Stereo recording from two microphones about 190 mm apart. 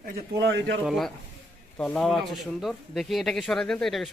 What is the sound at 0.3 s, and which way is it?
Speech, 70° right (ahead or behind).